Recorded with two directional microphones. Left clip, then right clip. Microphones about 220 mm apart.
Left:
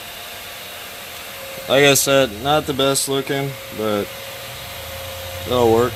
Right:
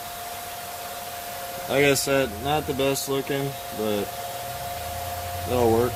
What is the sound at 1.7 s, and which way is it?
Speech, 45° left (ahead or behind).